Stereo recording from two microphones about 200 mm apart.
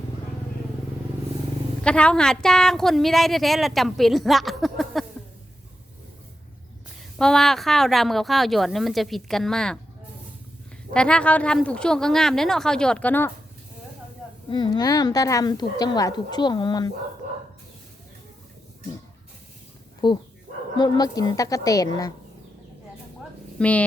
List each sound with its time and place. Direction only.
1.8 s a woman's voice: 5° left (ahead or behind)
7.2 s a woman's voice: 5° left (ahead or behind)
10.9 s a woman's voice: 5° left (ahead or behind)
14.5 s a woman's voice: 20° left (ahead or behind)
20.0 s a woman's voice: 20° left (ahead or behind)
23.6 s a woman's voice: 5° left (ahead or behind)